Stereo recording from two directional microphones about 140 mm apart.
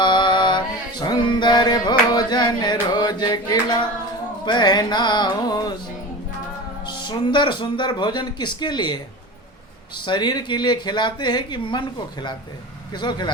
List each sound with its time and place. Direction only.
0.0 s music: 35° left (ahead or behind)
4.4 s speech: 30° left (ahead or behind)
6.8 s speech: 35° left (ahead or behind)
10.1 s speech: 30° left (ahead or behind)